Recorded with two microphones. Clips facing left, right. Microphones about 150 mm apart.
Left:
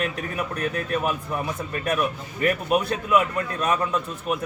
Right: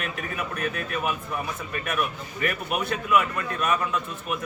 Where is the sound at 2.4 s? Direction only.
30° left (ahead or behind).